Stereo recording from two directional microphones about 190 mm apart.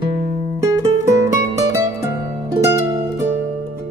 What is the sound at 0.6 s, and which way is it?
Music, 15° right (ahead or behind).